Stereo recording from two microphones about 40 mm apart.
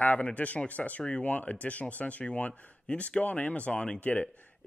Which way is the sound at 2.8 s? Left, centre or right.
Left.